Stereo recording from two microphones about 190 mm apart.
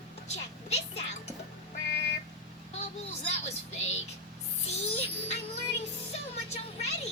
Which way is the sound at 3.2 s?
35° left (ahead or behind).